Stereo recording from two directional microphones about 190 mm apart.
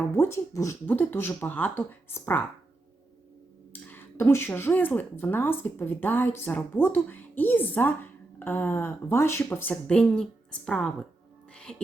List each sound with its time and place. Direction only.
0.1 s speech: 15° left (ahead or behind)
3.7 s speech: 10° left (ahead or behind)
11.5 s music: 5° left (ahead or behind)